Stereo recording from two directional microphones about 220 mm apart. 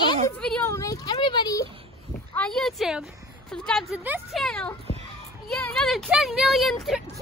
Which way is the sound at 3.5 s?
5° left (ahead or behind).